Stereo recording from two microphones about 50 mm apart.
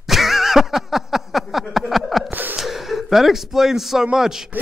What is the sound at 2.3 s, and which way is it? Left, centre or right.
Laughter, right.